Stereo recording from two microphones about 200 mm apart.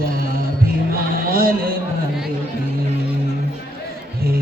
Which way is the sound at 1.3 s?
45° right (ahead or behind).